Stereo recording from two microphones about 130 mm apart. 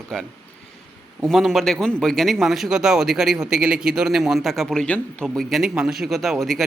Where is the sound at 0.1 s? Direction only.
5° left (ahead or behind).